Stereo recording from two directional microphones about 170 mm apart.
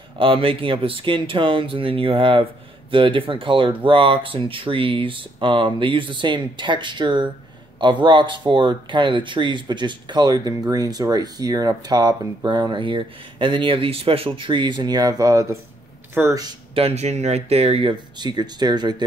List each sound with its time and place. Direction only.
0.2 s speech: 30° right (ahead or behind)
16.7 s speech: 35° right (ahead or behind)